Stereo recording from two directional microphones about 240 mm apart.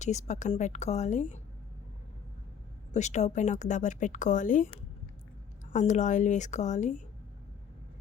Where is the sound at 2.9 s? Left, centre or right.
Left.